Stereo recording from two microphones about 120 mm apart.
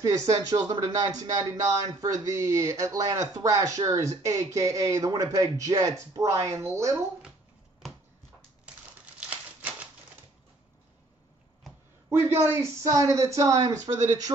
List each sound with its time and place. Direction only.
0.5 s speech: 30° right (ahead or behind)
9.2 s typewriter: 10° right (ahead or behind)
12.1 s speech: 20° right (ahead or behind)